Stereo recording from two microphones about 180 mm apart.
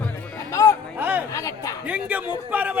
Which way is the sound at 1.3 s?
20° left (ahead or behind).